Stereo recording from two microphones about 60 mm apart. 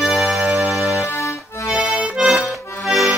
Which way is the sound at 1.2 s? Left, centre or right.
Left.